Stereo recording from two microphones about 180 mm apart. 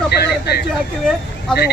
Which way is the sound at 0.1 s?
65° left (ahead or behind).